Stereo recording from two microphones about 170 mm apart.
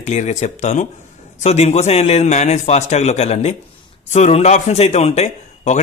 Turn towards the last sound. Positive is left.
turn(degrees=40)  # may be behind; listen again after turning